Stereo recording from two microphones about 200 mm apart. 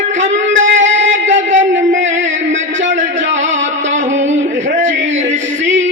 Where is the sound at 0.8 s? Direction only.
65° right (ahead or behind).